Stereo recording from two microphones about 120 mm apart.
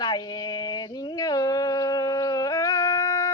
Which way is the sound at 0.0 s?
35° left (ahead or behind).